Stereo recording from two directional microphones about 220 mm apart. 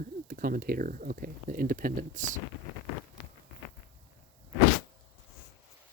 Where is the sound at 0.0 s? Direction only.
40° right (ahead or behind).